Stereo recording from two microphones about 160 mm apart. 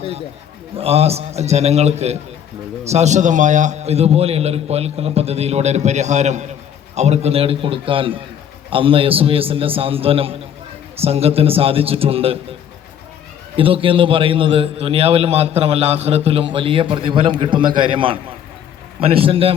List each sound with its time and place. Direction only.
0.8 s a man's voice: 40° right (ahead or behind)
13.6 s a man's voice: 35° right (ahead or behind)